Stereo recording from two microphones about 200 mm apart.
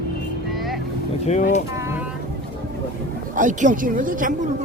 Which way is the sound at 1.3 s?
35° left (ahead or behind).